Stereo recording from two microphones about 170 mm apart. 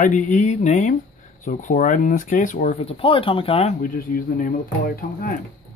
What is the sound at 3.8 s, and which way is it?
Speech, 55° left (ahead or behind).